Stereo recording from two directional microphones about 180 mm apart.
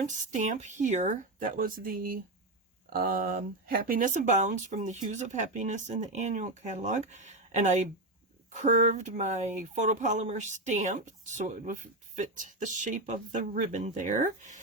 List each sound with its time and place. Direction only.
0.0 s speech: 45° right (ahead or behind)